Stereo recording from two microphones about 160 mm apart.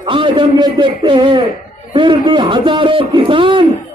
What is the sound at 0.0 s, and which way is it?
A man's voice, 30° right (ahead or behind).